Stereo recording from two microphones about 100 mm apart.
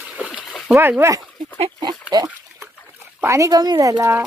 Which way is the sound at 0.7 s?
25° right (ahead or behind).